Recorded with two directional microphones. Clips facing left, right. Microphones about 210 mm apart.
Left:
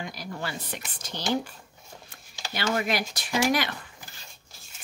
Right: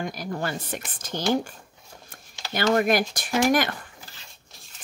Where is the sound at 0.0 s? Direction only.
50° right (ahead or behind).